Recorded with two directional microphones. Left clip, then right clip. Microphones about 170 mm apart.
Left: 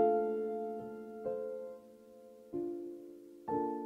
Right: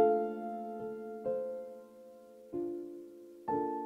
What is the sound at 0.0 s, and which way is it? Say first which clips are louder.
Music: right 1 dB; 20° left (ahead or behind).